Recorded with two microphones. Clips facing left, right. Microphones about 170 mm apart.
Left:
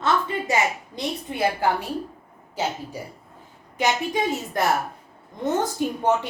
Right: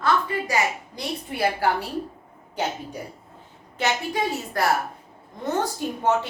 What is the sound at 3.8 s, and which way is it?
A woman's voice, 20° left (ahead or behind).